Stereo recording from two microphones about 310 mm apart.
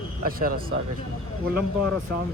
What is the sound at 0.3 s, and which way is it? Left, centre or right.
Speech, right.